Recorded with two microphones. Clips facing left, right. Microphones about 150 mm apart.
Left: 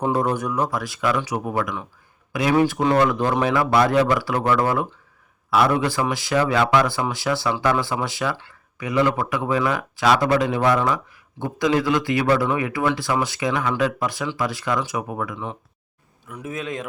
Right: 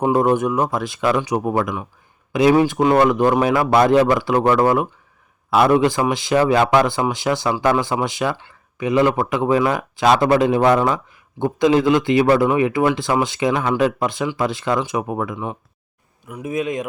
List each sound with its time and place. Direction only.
0.2 s speech: 25° right (ahead or behind)
5.5 s a man's voice: 25° right (ahead or behind)